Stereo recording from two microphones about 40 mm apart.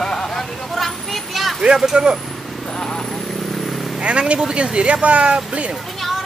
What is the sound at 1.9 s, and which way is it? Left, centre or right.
Speech, centre.